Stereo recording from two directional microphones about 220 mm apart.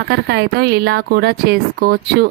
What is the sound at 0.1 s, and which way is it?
A woman's voice, 50° right (ahead or behind).